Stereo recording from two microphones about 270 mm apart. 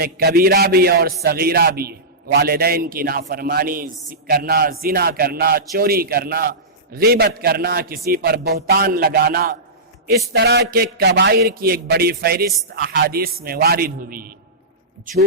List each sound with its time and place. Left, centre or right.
0.0 s a man's voice: right